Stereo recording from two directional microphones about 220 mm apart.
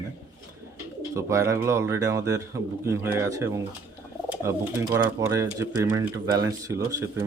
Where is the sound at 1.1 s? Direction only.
15° right (ahead or behind).